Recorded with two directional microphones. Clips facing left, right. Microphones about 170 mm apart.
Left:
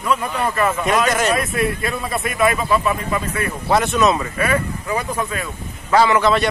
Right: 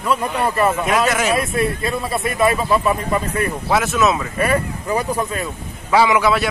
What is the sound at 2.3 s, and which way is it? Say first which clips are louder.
A man's voice: right 1 dB; 30° right (ahead or behind).